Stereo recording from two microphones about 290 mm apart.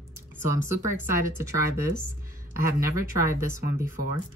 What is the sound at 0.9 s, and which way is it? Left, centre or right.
Speech, centre.